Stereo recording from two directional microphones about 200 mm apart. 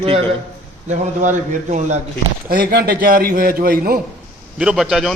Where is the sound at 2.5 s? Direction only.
45° right (ahead or behind).